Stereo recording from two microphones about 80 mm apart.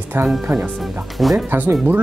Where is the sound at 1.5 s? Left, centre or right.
Right.